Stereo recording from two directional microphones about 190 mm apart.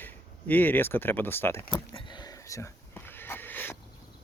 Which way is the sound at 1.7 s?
25° left (ahead or behind).